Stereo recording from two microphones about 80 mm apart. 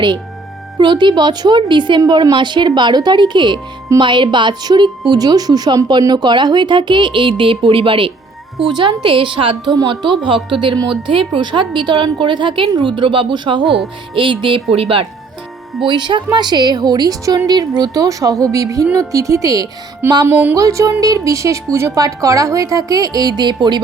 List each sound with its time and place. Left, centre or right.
0.8 s speech: right
4.0 s a woman's voice: right
5.1 s a woman's voice: right
9.7 s a woman's voice: right
14.2 s a woman's voice: right
15.9 s a woman's voice: right
20.2 s music: right
20.6 s a woman's voice: right
23.4 s a woman's voice: right